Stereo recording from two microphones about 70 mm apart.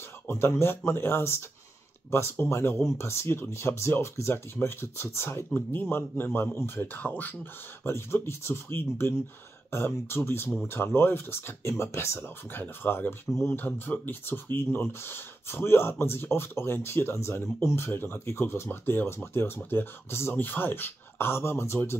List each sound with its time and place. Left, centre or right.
0.3 s speech: left
7.8 s speech: left